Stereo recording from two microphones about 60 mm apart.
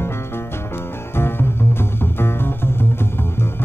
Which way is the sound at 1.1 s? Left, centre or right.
Left.